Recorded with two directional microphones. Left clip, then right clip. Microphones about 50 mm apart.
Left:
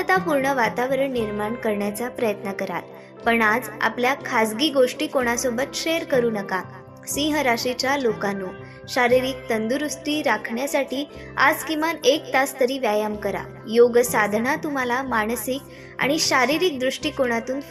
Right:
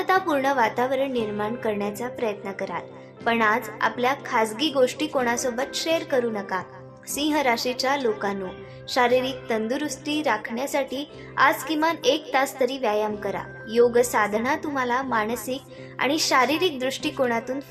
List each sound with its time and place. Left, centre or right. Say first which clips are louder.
0.0 s a woman's voice: left 1 dB; left
1.8 s a woman's voice: left 2 dB; left
3.2 s a woman's voice: left 2 dB; left
6.5 s a woman's voice: left 2 dB; left
7.1 s a woman's voice: left 1 dB; left
11.5 s a woman's voice: even; left